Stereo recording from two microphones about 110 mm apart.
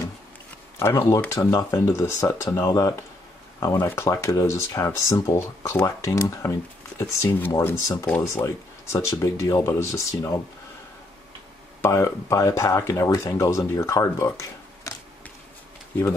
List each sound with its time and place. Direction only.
0.7 s speech: 20° left (ahead or behind)
3.7 s speech: 20° left (ahead or behind)
11.8 s speech: 25° left (ahead or behind)
14.8 s a sound: 30° left (ahead or behind)